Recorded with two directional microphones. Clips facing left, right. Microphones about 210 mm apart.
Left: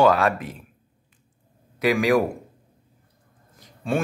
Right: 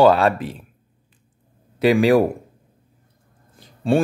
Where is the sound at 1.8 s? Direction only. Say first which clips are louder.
Right 5 dB; 30° right (ahead or behind).